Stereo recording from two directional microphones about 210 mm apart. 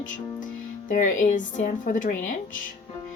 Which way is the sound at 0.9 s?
35° left (ahead or behind).